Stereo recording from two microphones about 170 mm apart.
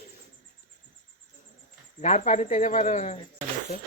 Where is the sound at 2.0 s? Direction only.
45° left (ahead or behind).